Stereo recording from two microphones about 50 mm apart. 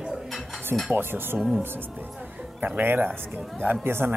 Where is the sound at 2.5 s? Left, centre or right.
Right.